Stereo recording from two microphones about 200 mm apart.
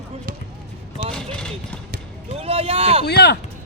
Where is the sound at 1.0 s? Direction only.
30° right (ahead or behind).